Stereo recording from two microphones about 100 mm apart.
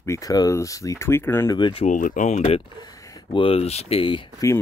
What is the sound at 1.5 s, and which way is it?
Speech, 50° left (ahead or behind).